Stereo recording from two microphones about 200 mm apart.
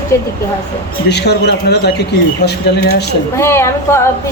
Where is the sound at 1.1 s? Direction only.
55° left (ahead or behind).